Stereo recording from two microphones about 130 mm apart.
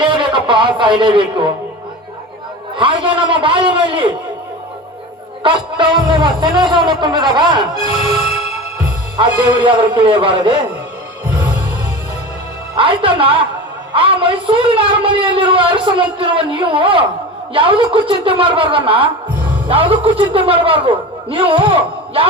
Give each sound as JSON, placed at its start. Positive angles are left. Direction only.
{"t": 0.0, "sound": "speech", "side_deg": -40}
{"t": 2.7, "sound": "a man's voice", "side_deg": -40}
{"t": 5.4, "sound": "a man's voice", "side_deg": -40}
{"t": 9.1, "sound": "a man's voice", "side_deg": -35}
{"t": 12.7, "sound": "a man's voice", "side_deg": -40}